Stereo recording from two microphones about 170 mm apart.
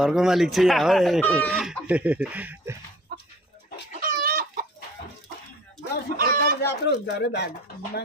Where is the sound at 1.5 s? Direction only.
5° right (ahead or behind).